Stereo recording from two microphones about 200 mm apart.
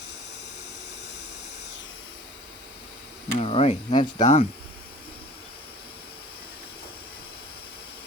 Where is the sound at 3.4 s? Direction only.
30° left (ahead or behind).